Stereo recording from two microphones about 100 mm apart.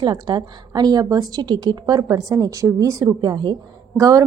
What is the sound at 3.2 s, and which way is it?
Speech, 50° right (ahead or behind).